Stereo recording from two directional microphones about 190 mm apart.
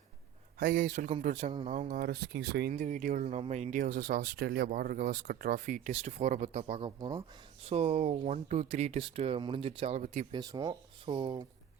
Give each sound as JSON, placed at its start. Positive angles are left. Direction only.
{"t": 0.6, "sound": "speech", "side_deg": -45}
{"t": 2.7, "sound": "speech", "side_deg": -40}
{"t": 10.3, "sound": "speech", "side_deg": -20}